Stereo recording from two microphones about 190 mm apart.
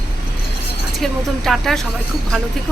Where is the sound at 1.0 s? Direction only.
Centre (ahead or behind).